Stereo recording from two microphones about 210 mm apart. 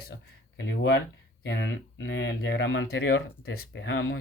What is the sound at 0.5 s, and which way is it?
Speech, 60° left (ahead or behind).